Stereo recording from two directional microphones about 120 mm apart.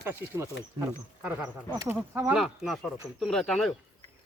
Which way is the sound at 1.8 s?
20° right (ahead or behind).